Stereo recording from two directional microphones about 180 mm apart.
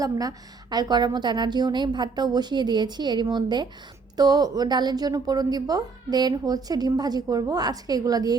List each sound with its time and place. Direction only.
0.0 s a woman's voice: 20° right (ahead or behind)